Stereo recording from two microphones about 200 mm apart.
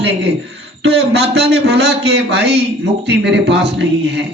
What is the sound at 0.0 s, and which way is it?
A man's voice, 60° right (ahead or behind).